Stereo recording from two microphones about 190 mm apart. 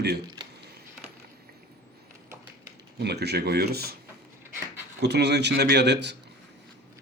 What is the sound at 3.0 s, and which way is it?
Speech, 60° right (ahead or behind).